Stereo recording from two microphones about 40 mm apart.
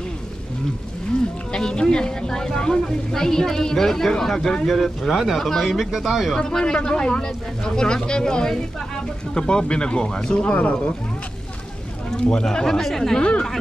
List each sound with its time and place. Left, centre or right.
1.5 s speech: left
5.6 s speech: centre
6.3 s speech: centre
12.3 s speech: centre
13.2 s speech: left